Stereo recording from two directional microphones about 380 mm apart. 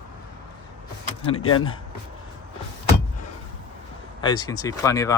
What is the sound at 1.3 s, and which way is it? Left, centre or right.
Speech, left.